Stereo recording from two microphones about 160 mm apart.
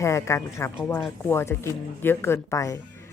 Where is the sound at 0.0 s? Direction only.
20° left (ahead or behind).